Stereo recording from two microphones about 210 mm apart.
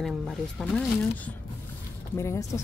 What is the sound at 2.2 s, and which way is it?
Speech, 15° left (ahead or behind).